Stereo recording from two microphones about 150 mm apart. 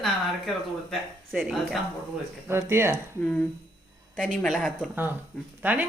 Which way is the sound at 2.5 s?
15° right (ahead or behind).